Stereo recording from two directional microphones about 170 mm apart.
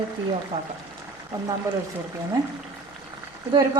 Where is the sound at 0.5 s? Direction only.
35° right (ahead or behind).